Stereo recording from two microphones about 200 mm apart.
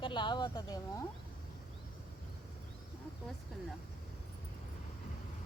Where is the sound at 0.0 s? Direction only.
25° left (ahead or behind).